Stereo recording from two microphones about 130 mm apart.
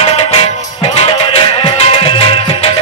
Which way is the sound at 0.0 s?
50° left (ahead or behind).